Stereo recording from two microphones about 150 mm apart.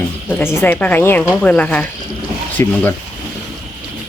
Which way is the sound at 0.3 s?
15° left (ahead or behind).